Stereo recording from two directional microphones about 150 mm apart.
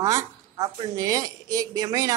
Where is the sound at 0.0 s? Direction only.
25° right (ahead or behind).